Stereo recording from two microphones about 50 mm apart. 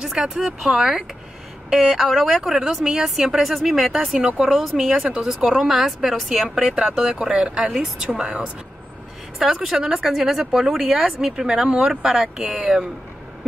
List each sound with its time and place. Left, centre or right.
0.0 s a woman's voice: centre
4.9 s speech: centre
9.4 s speech: centre
12.4 s speech: right